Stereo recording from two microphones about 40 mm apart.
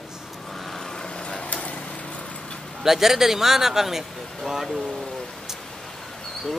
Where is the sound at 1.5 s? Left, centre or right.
Left.